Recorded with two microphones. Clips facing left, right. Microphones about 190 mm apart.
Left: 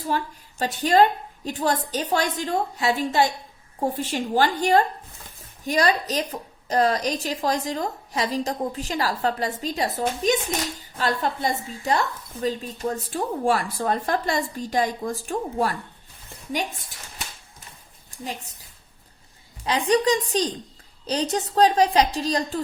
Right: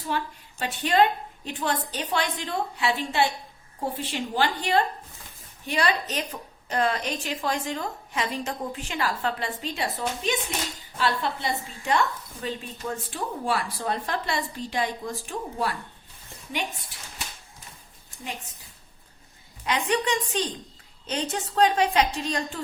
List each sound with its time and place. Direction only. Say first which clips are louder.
0.1 s a woman's voice: left 3 dB; 40° left (ahead or behind)
19.9 s a woman's voice: left 8 dB; 35° left (ahead or behind)